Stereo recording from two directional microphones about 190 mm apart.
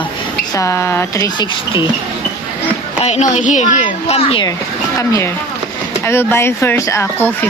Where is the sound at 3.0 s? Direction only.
35° left (ahead or behind).